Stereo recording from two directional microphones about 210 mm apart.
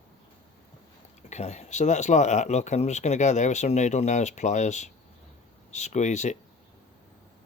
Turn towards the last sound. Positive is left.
turn(degrees=35)  # may be behind; listen again after turning